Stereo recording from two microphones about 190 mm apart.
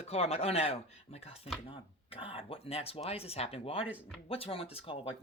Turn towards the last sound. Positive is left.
turn(degrees=30)  # may be behind; listen again after turning